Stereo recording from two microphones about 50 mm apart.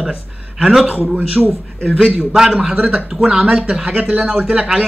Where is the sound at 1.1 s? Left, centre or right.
Right.